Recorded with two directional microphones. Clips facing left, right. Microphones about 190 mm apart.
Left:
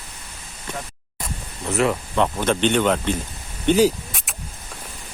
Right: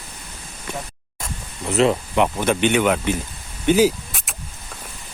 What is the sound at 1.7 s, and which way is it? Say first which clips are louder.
Speech: right 3 dB; 20° right (ahead or behind).